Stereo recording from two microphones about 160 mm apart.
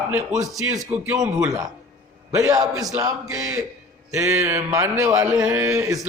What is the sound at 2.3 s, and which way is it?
Speech, 20° right (ahead or behind).